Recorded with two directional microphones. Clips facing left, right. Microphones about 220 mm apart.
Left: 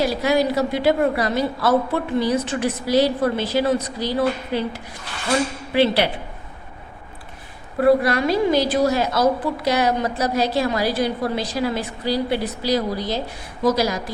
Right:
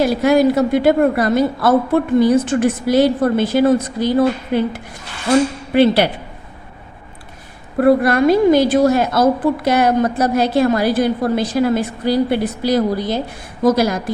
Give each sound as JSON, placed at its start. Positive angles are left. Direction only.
{"t": 0.0, "sound": "a woman's voice", "side_deg": -50}
{"t": 7.8, "sound": "a woman's voice", "side_deg": -50}